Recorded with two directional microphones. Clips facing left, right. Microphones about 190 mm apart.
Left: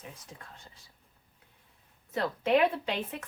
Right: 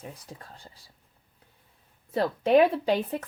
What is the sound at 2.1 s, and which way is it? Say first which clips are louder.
A child's voice: right 5 dB; 30° right (ahead or behind).